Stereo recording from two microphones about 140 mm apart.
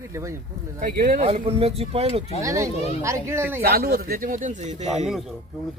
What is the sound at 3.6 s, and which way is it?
Speech, 90° right.